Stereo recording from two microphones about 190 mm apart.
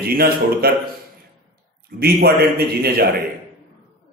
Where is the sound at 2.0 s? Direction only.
55° right (ahead or behind).